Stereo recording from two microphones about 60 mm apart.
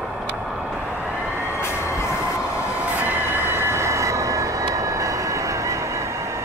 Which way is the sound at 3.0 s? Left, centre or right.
Right.